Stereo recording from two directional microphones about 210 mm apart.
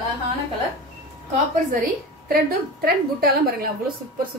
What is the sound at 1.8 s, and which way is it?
A woman's voice, 45° right (ahead or behind).